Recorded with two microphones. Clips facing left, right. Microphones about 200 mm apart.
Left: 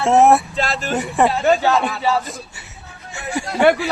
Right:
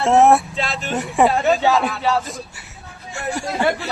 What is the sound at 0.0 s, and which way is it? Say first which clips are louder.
Speech: even; centre (ahead or behind).